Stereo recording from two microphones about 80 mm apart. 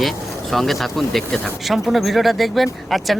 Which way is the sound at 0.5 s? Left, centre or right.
Centre.